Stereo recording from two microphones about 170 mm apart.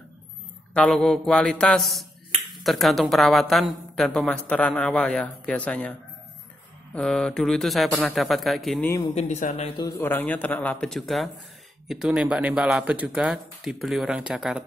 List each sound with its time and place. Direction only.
0.7 s speech: 5° left (ahead or behind)
8.8 s speech: 20° left (ahead or behind)
9.1 s speech: 45° left (ahead or behind)
9.8 s speech: 20° left (ahead or behind); by 14.6 s 5° right (ahead or behind)